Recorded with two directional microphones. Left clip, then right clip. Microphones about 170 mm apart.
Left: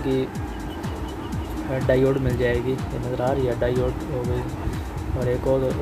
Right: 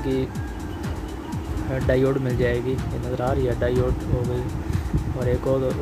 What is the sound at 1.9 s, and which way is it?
Speech, 10° right (ahead or behind).